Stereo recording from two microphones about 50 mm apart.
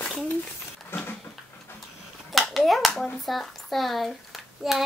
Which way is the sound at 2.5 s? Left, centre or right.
Centre.